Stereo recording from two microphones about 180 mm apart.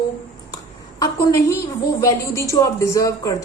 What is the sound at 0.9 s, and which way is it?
A woman's voice, 20° left (ahead or behind).